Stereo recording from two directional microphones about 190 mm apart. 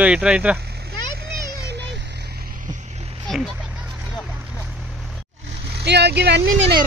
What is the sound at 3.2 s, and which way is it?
Speech, centre (ahead or behind).